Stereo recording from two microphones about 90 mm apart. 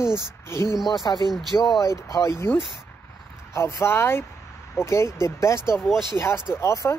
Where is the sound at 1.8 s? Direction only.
35° left (ahead or behind).